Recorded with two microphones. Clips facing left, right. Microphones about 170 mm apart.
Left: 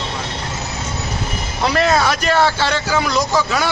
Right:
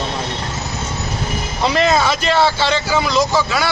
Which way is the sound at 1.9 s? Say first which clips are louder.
Even; 15° right (ahead or behind).